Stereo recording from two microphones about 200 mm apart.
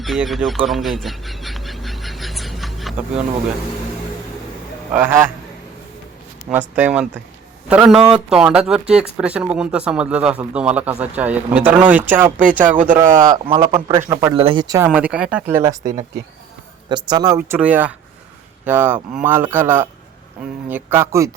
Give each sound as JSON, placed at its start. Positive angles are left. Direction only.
{"t": 0.0, "sound": "a sound", "side_deg": 0}
{"t": 4.9, "sound": "speech", "side_deg": -10}
{"t": 6.5, "sound": "speech", "side_deg": -5}
{"t": 14.8, "sound": "speech", "side_deg": -5}
{"t": 16.9, "sound": "speech", "side_deg": -20}